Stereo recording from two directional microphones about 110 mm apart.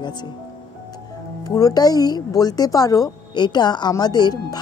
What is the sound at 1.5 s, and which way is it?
Speech, 35° left (ahead or behind).